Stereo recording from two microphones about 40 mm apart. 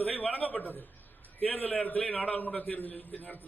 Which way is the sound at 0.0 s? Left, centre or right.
Left.